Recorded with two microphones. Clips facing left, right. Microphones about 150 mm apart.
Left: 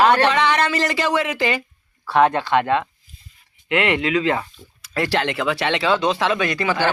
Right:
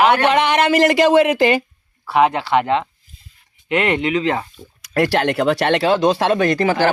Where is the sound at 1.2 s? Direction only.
55° right (ahead or behind).